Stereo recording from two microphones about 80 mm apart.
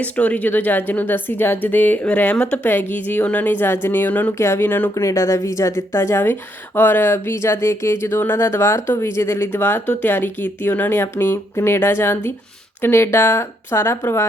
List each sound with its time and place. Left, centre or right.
0.0 s speech: centre
4.4 s speech: left
4.9 s speech: left